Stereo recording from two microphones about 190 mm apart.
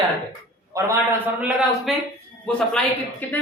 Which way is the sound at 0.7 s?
15° right (ahead or behind).